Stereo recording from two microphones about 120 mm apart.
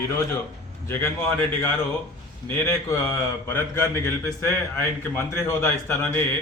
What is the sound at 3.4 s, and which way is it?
A man's voice, 20° left (ahead or behind).